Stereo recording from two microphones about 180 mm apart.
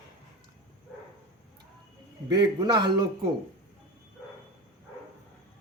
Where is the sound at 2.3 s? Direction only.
25° right (ahead or behind).